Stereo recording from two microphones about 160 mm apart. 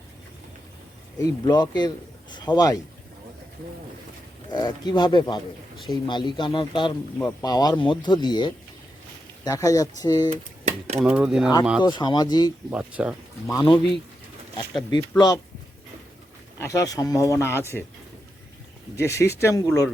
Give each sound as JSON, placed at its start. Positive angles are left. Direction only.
{"t": 1.2, "sound": "speech", "side_deg": 25}
{"t": 4.5, "sound": "speech", "side_deg": 25}
{"t": 5.7, "sound": "speech", "side_deg": 0}
{"t": 6.1, "sound": "a man's voice", "side_deg": 30}
{"t": 7.2, "sound": "speech", "side_deg": 20}
{"t": 10.2, "sound": "speech", "side_deg": -45}
{"t": 11.0, "sound": "speech", "side_deg": -5}
{"t": 11.8, "sound": "speech", "side_deg": 30}
{"t": 12.7, "sound": "speech", "side_deg": -10}
{"t": 13.5, "sound": "speech", "side_deg": 20}
{"t": 14.8, "sound": "speech", "side_deg": 25}
{"t": 16.6, "sound": "speech", "side_deg": 20}
{"t": 18.9, "sound": "speech", "side_deg": 15}